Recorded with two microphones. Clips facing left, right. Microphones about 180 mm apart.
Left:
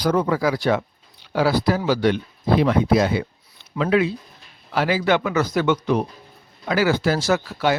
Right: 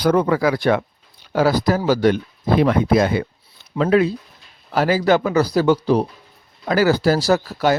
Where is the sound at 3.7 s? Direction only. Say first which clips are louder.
Right 3 dB; 40° right (ahead or behind).